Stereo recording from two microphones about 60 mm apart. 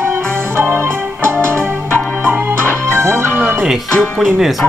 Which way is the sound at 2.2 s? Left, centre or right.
Right.